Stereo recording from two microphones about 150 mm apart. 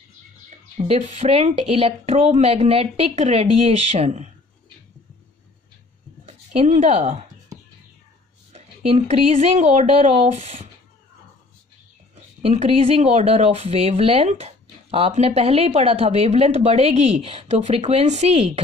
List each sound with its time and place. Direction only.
0.7 s speech: 45° right (ahead or behind)
6.2 s a sound: 45° right (ahead or behind)
8.5 s speech: 45° right (ahead or behind)
12.4 s speech: 45° right (ahead or behind)